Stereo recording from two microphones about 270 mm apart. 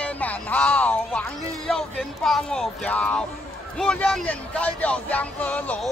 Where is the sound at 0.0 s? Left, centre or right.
Centre.